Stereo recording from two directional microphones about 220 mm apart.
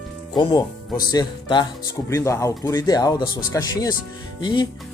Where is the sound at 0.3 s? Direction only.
20° left (ahead or behind).